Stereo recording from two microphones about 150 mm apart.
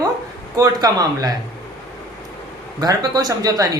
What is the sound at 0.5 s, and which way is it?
Speech, 25° right (ahead or behind).